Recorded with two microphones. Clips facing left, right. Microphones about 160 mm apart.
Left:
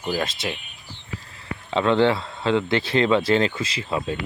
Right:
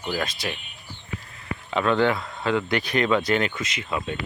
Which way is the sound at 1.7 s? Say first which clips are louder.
Left 3 dB; 25° left (ahead or behind).